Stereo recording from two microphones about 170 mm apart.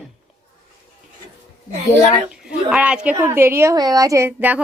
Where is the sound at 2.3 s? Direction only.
5° right (ahead or behind).